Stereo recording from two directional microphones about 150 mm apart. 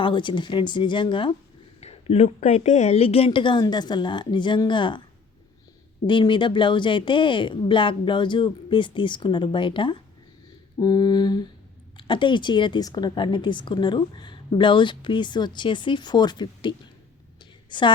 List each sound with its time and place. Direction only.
0.0 s a woman's voice: 30° left (ahead or behind)
6.1 s a woman's voice: 30° left (ahead or behind)
10.8 s mantra: 25° left (ahead or behind)
11.9 s a woman's voice: 35° left (ahead or behind)